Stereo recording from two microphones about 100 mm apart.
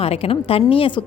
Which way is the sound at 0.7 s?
60° left (ahead or behind).